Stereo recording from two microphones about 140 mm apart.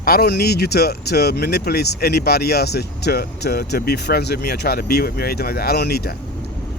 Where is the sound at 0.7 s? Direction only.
90° left.